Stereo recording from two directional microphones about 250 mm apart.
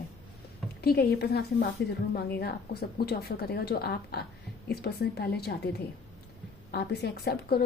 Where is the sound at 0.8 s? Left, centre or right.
Left.